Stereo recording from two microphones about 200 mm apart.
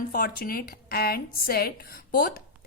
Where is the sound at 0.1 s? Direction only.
45° left (ahead or behind).